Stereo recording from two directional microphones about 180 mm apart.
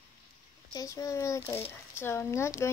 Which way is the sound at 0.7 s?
20° left (ahead or behind).